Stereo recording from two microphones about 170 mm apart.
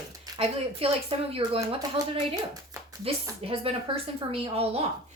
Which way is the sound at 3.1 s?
35° right (ahead or behind).